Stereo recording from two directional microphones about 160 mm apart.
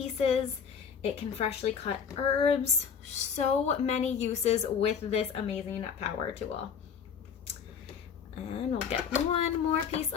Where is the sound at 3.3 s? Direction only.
40° left (ahead or behind).